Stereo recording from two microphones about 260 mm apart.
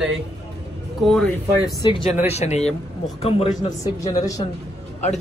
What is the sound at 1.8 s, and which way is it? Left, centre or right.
Speech, centre.